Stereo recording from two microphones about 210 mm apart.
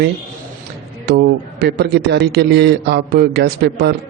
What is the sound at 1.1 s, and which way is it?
A man's voice, 50° right (ahead or behind).